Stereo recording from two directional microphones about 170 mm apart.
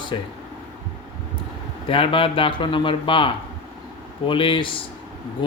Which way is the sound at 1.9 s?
30° left (ahead or behind).